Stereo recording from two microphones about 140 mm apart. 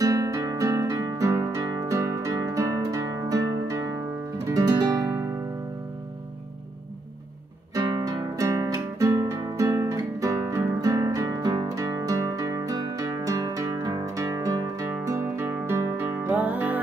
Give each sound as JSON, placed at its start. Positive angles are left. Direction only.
{"t": 0.0, "sound": "music", "side_deg": -20}
{"t": 7.7, "sound": "music", "side_deg": -30}